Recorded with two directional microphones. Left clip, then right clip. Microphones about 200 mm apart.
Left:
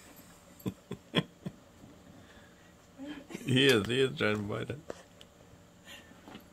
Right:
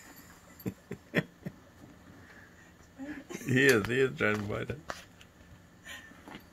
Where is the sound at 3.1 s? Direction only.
15° left (ahead or behind).